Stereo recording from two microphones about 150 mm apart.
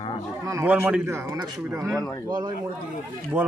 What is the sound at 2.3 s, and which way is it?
Speech, 30° right (ahead or behind).